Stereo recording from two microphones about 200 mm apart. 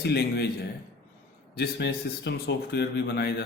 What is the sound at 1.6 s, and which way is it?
A man's voice, 60° left (ahead or behind).